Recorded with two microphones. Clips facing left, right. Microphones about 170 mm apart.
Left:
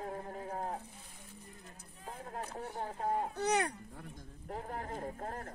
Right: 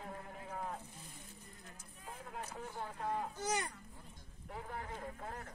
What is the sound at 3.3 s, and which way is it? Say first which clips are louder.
Speech: left 7 dB; 65° left (ahead or behind).